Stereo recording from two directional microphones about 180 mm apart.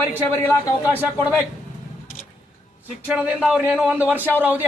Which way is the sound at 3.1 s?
5° right (ahead or behind).